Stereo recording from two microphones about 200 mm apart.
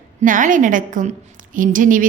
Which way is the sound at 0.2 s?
40° right (ahead or behind).